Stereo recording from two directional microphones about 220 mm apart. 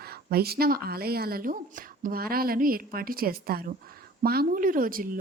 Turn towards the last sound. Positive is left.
turn(degrees=-40)  # may be behind; listen again after turning